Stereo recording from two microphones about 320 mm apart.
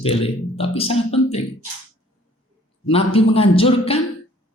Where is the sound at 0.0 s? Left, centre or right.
Centre.